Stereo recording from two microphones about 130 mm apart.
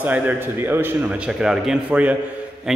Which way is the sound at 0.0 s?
15° right (ahead or behind).